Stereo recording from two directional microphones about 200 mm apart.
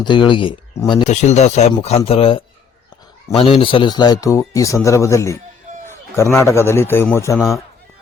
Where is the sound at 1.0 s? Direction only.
35° left (ahead or behind); by 7.1 s 10° left (ahead or behind).